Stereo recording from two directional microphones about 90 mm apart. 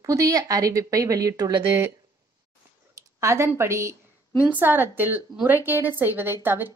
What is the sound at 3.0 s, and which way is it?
Speech, 35° right (ahead or behind).